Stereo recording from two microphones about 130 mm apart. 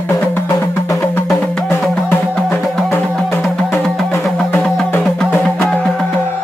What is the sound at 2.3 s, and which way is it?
Music, 5° left (ahead or behind).